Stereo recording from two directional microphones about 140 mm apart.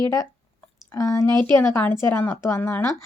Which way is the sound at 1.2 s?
30° right (ahead or behind).